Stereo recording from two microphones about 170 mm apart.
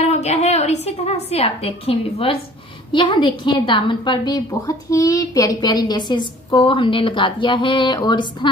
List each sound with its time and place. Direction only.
0.0 s a woman's voice: 40° left (ahead or behind)